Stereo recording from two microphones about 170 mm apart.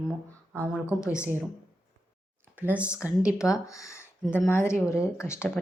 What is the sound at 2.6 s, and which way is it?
Speech, 10° right (ahead or behind).